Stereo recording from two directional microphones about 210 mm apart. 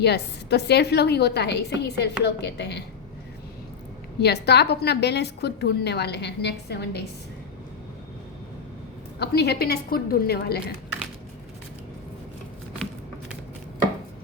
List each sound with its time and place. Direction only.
0.0 s a woman's voice: 50° left (ahead or behind)
4.2 s a woman's voice: 50° left (ahead or behind)
9.1 s a woman's voice: 50° left (ahead or behind)